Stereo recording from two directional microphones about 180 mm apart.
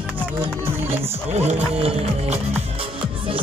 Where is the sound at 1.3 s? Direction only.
40° right (ahead or behind).